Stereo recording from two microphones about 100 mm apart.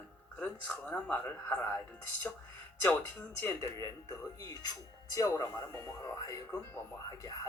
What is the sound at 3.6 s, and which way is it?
Speech, 35° left (ahead or behind).